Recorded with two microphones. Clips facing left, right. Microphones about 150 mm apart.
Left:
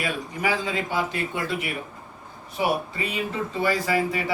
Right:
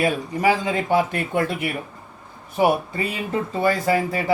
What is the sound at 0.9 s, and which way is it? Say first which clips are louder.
Speech: right 6 dB; 55° right (ahead or behind).